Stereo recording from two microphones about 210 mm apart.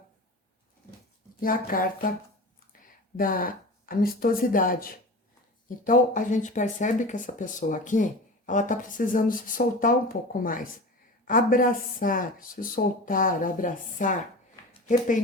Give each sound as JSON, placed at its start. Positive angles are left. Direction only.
{"t": 1.4, "sound": "speech", "side_deg": 40}